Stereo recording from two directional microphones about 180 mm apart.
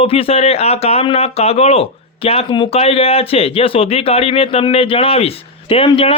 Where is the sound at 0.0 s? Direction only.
35° left (ahead or behind).